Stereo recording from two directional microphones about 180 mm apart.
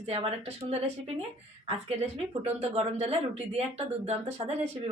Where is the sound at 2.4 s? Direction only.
35° right (ahead or behind).